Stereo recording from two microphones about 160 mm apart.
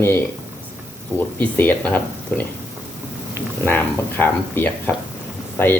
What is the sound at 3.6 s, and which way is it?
Speech, 10° left (ahead or behind).